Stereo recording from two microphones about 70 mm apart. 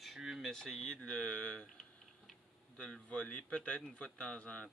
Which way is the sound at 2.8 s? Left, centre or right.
Centre.